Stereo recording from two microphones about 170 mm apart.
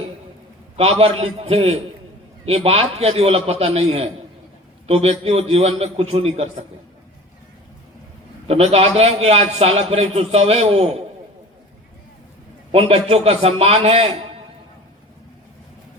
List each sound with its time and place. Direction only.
0.8 s a man's voice: 35° right (ahead or behind)
8.4 s a man's voice: 35° right (ahead or behind)
12.7 s a man's voice: 35° right (ahead or behind)